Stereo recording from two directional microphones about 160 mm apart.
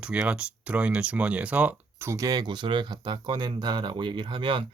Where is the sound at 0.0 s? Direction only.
5° right (ahead or behind).